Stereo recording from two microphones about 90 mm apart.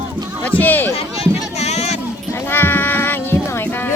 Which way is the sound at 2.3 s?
25° left (ahead or behind).